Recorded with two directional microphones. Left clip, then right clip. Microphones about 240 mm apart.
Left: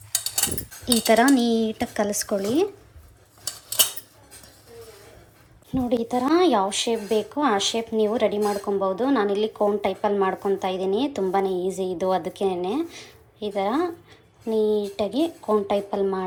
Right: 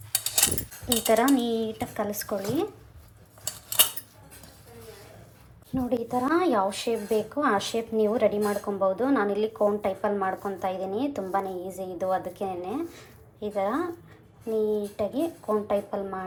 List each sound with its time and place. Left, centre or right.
1.0 s speech: centre
5.7 s speech: centre